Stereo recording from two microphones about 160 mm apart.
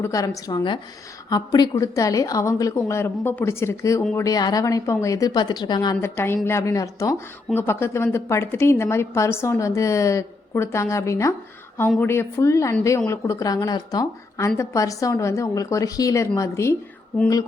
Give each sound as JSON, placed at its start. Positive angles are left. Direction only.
{"t": 0.0, "sound": "a woman's voice", "side_deg": 20}